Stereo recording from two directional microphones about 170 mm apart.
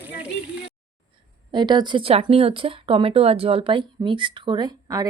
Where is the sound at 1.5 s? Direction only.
25° right (ahead or behind).